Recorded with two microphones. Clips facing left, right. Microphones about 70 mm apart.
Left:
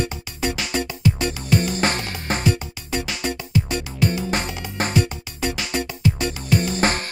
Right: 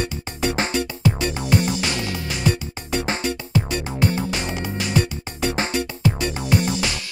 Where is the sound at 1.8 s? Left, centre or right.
Left.